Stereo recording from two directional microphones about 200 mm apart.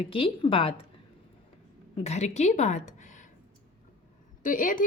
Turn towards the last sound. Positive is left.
turn(degrees=40)  # may be behind; listen again after turning